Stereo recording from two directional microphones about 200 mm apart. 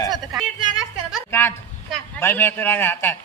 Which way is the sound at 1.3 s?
10° left (ahead or behind).